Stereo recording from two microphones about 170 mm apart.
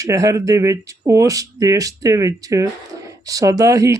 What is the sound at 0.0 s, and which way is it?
Speech, 20° right (ahead or behind).